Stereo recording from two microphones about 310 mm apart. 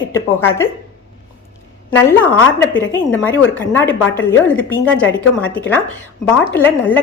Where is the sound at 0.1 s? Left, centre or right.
Centre.